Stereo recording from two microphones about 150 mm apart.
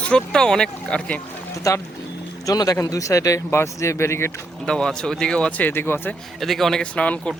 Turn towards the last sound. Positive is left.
turn(degrees=10)  # may be behind; listen again after turning